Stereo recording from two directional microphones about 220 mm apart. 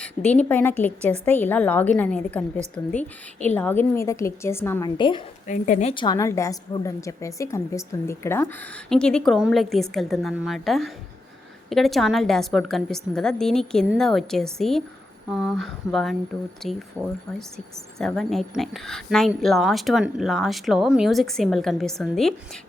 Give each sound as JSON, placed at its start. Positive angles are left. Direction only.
{"t": 0.0, "sound": "a woman's voice", "side_deg": 5}
{"t": 4.9, "sound": "a woman's voice", "side_deg": 20}
{"t": 5.5, "sound": "a woman's voice", "side_deg": 35}
{"t": 5.9, "sound": "a woman's voice", "side_deg": 20}
{"t": 17.9, "sound": "speech", "side_deg": 0}